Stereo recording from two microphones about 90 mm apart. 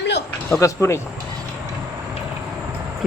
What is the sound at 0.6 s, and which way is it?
Speech, 35° left (ahead or behind).